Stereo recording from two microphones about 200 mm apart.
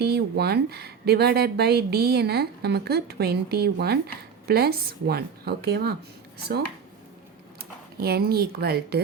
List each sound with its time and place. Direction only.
0.0 s speech: 55° right (ahead or behind)
7.9 s speech: 50° right (ahead or behind)